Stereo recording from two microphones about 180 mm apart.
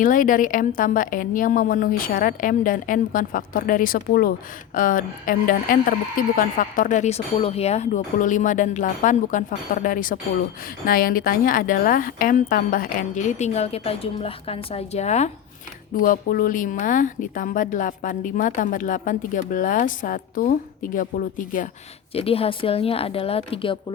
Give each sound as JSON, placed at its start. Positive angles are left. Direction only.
{"t": 0.0, "sound": "a woman's voice", "side_deg": 45}
{"t": 16.0, "sound": "a woman's voice", "side_deg": 50}
{"t": 22.1, "sound": "a woman's voice", "side_deg": 30}